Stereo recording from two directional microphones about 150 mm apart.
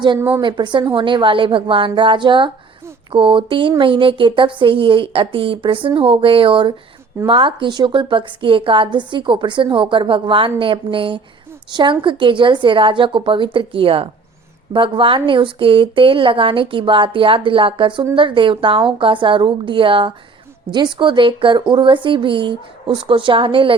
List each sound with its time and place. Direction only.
0.2 s a woman's voice: 15° right (ahead or behind)
0.4 s a woman's voice: 30° right (ahead or behind)